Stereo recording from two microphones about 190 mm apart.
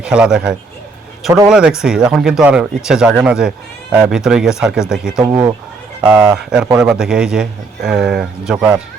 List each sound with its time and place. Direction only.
0.0 s a man's voice: 5° right (ahead or behind)
5.2 s speech: 15° right (ahead or behind)
6.0 s a man's voice: 5° right (ahead or behind)